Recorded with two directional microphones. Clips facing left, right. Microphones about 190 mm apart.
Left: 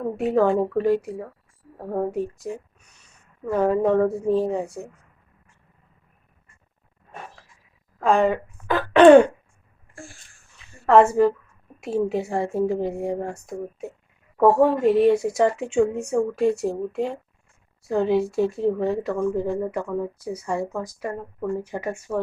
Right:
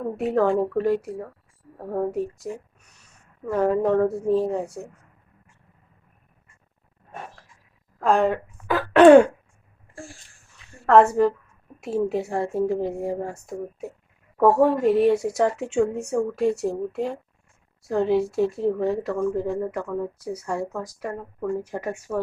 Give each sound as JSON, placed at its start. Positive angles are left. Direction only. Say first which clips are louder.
{"t": 0.2, "sound": "speech", "louder": "left 1 dB", "side_deg": 0}
{"t": 8.0, "sound": "speech", "louder": "left 1 dB", "side_deg": 0}
{"t": 10.8, "sound": "speech", "louder": "left 1 dB", "side_deg": 0}